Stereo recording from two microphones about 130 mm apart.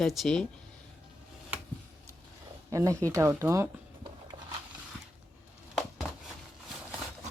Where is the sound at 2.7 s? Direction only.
25° right (ahead or behind).